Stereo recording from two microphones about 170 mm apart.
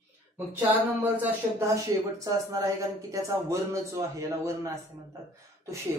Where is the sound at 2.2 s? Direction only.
20° right (ahead or behind).